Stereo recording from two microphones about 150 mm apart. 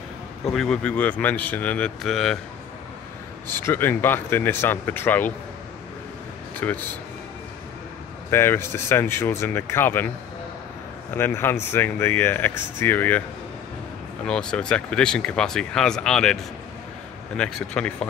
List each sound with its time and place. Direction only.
0.5 s speech: 5° left (ahead or behind)
3.5 s speech: 15° left (ahead or behind)
6.6 s speech: 10° left (ahead or behind)
8.3 s speech: 15° left (ahead or behind)
14.2 s speech: 5° left (ahead or behind)
17.4 s speech: 5° left (ahead or behind)